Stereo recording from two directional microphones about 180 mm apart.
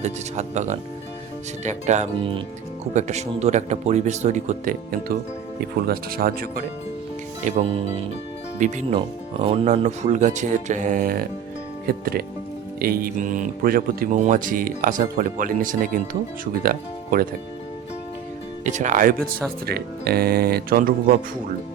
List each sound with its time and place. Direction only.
0.0 s speech: 40° right (ahead or behind)
2.1 s speech: 30° right (ahead or behind)
2.9 s speech: 40° right (ahead or behind)
7.5 s speech: 45° right (ahead or behind)
8.9 s speech: 30° right (ahead or behind); by 17.2 s 55° right (ahead or behind)
18.6 s speech: 45° right (ahead or behind)
19.6 s speech: 60° right (ahead or behind)